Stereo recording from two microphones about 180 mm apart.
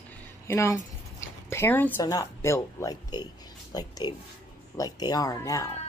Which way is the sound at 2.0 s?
20° left (ahead or behind).